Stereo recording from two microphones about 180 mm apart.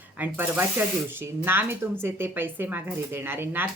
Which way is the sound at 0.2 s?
10° right (ahead or behind).